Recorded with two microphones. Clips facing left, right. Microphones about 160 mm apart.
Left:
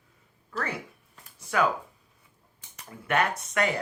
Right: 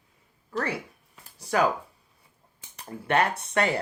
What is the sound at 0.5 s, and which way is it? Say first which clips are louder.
Speech: right 3 dB; 35° right (ahead or behind).